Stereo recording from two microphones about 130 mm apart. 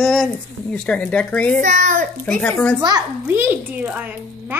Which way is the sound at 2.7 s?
35° right (ahead or behind).